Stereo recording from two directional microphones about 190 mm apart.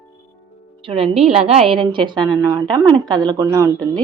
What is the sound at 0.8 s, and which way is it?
A woman's voice, 30° right (ahead or behind).